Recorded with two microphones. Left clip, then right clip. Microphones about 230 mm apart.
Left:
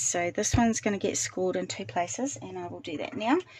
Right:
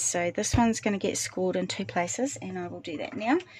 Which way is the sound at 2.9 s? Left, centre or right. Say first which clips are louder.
Even; centre.